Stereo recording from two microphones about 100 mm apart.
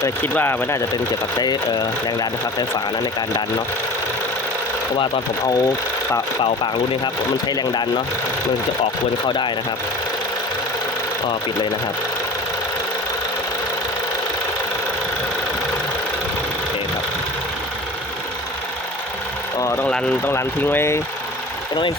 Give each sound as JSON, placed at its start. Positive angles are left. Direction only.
{"t": 0.2, "sound": "speech", "side_deg": 20}
{"t": 1.4, "sound": "speech", "side_deg": 45}
{"t": 5.5, "sound": "speech", "side_deg": 40}
{"t": 7.0, "sound": "speech", "side_deg": 45}
{"t": 9.2, "sound": "speech", "side_deg": 50}
{"t": 19.5, "sound": "speech", "side_deg": 25}